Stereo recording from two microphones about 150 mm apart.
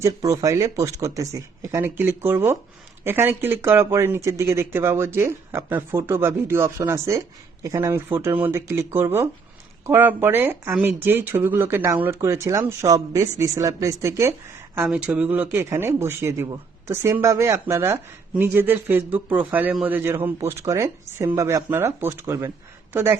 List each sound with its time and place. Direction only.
0.0 s speech: 20° right (ahead or behind)
14.8 s speech: 5° right (ahead or behind)